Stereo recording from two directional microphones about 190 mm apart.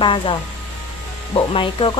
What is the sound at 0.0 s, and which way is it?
Speech, 25° left (ahead or behind).